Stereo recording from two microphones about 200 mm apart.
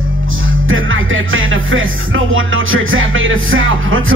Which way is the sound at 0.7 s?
85° right.